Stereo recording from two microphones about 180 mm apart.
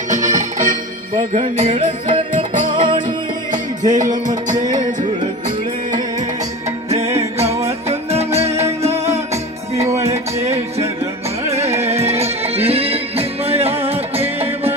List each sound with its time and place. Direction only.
0.1 s music: 45° right (ahead or behind); by 4.6 s 20° right (ahead or behind)
6.9 s music: 35° right (ahead or behind)
9.1 s music: 15° right (ahead or behind)
11.8 s music: 35° right (ahead or behind)